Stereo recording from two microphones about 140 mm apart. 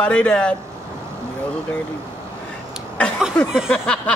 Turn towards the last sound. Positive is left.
turn(degrees=5)  # may be behind; listen again after turning